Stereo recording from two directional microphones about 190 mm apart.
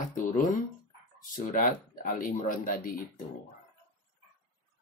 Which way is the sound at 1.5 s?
45° left (ahead or behind).